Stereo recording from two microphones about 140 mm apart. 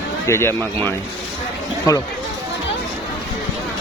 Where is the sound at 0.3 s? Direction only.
20° left (ahead or behind).